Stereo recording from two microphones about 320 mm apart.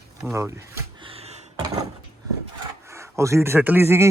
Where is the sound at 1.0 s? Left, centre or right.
Centre.